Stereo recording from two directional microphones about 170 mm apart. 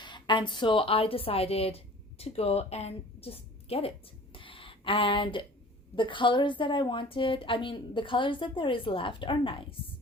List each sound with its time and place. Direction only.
0.0 s a woman's voice: 25° left (ahead or behind)
4.4 s a sound: 30° left (ahead or behind)
6.0 s a woman's voice: 30° left (ahead or behind)